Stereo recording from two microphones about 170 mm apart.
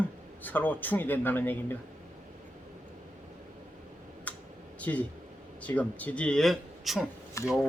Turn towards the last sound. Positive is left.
turn(degrees=20)  # may be behind; listen again after turning